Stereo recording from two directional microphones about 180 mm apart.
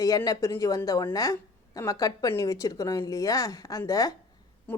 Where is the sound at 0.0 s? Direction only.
20° left (ahead or behind).